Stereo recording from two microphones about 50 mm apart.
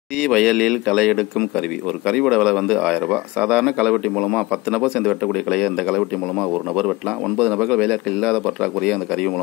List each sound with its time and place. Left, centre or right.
0.2 s speech: centre
4.2 s a man's voice: centre
4.6 s speech: centre
7.3 s speech: centre